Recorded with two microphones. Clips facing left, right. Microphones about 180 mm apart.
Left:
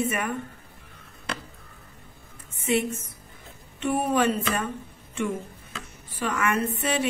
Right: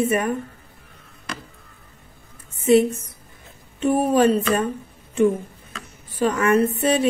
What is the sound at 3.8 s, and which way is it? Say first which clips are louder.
Speech: right 6 dB; 35° right (ahead or behind).